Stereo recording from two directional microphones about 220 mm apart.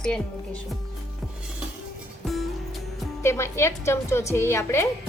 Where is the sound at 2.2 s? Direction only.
Centre (ahead or behind).